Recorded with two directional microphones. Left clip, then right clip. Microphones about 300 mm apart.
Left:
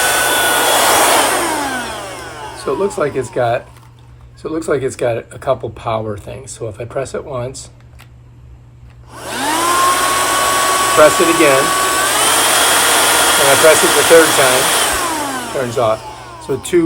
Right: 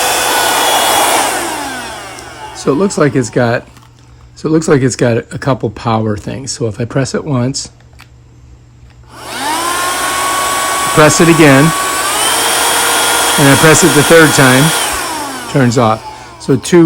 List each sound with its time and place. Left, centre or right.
0.0 s vacuum cleaner: centre
2.6 s speech: right
9.1 s hair dryer: centre
11.6 s a sound: centre
16.4 s a man's voice: right